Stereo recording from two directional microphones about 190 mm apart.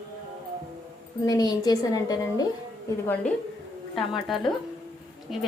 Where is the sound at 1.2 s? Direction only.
20° left (ahead or behind).